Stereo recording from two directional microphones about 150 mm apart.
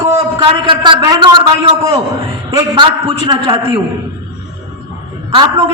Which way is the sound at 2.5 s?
25° right (ahead or behind).